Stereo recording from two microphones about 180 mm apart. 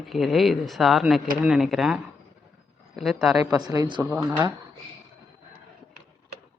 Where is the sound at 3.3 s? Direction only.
20° right (ahead or behind).